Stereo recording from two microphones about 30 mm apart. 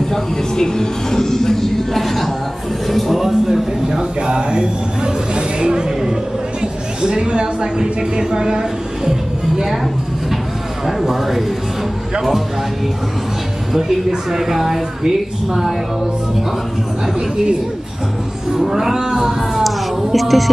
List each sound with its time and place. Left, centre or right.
0.1 s speech: centre
3.2 s a sound: centre
4.3 s music: right
6.6 s a sound: right
7.8 s a woman's voice: right
10.9 s a woman's voice: centre
13.7 s a woman's voice: centre
18.6 s a woman's voice: centre
19.6 s speech: centre